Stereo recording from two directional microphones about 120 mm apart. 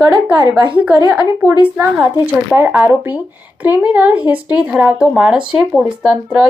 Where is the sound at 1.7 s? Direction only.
15° right (ahead or behind).